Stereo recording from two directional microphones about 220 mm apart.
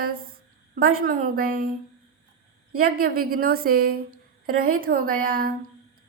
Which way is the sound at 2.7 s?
40° right (ahead or behind).